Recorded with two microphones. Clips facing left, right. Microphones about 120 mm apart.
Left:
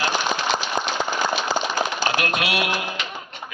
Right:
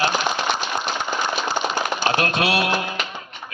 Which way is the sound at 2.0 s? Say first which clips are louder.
Right 3 dB; 30° right (ahead or behind).